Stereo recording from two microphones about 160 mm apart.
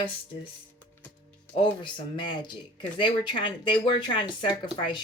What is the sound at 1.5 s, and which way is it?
Speech, 30° left (ahead or behind).